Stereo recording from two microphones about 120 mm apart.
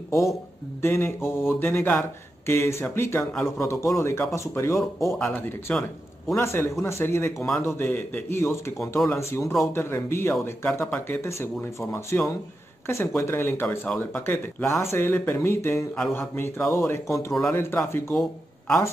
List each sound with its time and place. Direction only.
0.8 s speech: 20° left (ahead or behind)